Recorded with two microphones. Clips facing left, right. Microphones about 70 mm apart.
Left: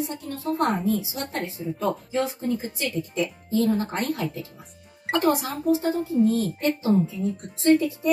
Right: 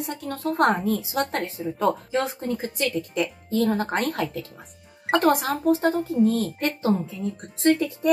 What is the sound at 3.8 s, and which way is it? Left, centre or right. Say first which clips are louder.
A woman's voice: right 2 dB; right.